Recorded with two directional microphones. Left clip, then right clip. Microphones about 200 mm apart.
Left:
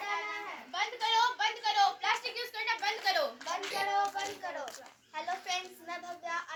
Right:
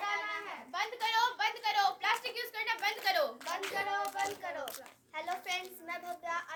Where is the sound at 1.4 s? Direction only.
25° right (ahead or behind).